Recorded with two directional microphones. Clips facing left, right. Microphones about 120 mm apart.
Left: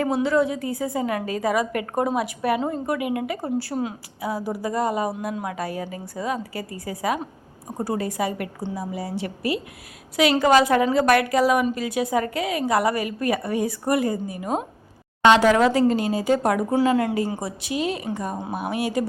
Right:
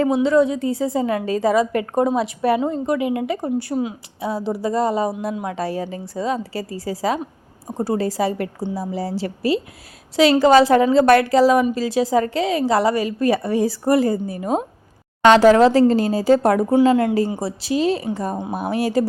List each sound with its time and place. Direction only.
0.0 s speech: 20° right (ahead or behind); by 19.0 s 40° right (ahead or behind)